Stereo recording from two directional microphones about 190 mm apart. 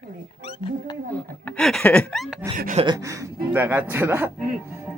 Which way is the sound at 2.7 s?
25° right (ahead or behind).